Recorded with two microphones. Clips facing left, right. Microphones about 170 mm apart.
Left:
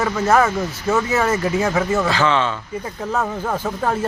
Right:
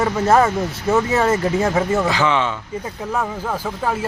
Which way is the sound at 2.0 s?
15° right (ahead or behind).